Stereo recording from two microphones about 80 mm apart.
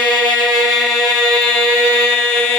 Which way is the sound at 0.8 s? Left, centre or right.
Centre.